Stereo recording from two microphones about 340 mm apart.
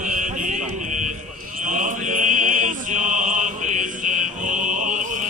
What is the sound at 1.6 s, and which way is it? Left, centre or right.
Mantra, right.